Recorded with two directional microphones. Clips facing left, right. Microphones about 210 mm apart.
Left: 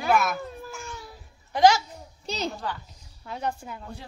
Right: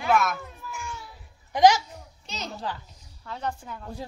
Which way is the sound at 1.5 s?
15° right (ahead or behind).